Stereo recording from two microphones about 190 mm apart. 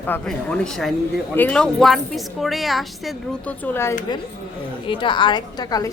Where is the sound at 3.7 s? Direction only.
15° left (ahead or behind).